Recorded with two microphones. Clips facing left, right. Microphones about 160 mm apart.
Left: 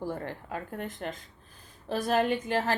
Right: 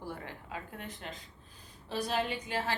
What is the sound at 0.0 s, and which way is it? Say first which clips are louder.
A woman's voice: left 8 dB; 45° left (ahead or behind).